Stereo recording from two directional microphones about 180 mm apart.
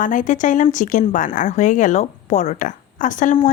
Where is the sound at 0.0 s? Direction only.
45° left (ahead or behind).